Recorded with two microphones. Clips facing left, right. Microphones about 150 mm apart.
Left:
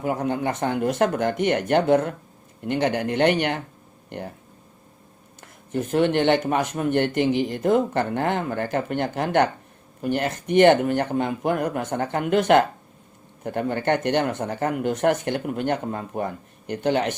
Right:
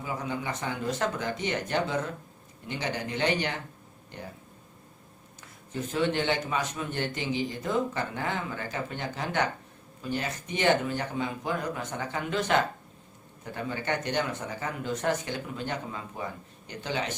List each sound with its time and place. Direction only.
0.0 s a man's voice: 60° left (ahead or behind)
5.4 s a man's voice: 60° left (ahead or behind)